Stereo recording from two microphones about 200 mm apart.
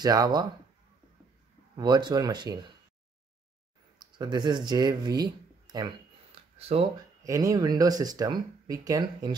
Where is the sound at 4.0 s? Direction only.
20° right (ahead or behind).